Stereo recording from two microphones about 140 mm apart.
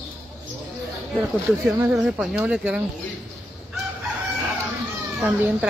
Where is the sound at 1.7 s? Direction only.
15° right (ahead or behind).